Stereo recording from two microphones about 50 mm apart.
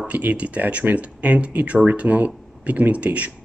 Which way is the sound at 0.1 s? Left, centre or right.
Right.